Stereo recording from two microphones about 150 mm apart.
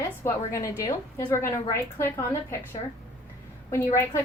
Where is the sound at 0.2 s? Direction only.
20° left (ahead or behind).